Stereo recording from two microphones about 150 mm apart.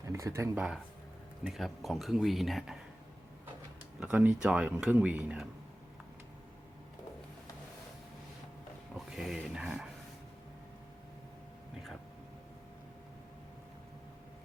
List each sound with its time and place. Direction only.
0.1 s speech: 20° right (ahead or behind)
1.5 s speech: centre (ahead or behind)
4.0 s speech: 10° right (ahead or behind)
9.0 s dog: 5° right (ahead or behind)